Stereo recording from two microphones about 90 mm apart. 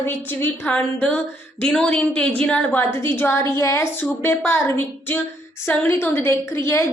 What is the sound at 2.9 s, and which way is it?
A woman's voice, 25° left (ahead or behind).